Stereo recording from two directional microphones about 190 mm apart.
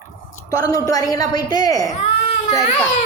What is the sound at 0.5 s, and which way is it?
Speech, 20° left (ahead or behind).